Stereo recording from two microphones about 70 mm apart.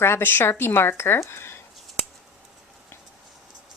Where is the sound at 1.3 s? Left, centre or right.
Left.